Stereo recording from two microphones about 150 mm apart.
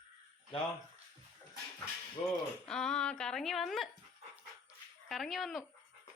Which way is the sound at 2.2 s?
40° left (ahead or behind).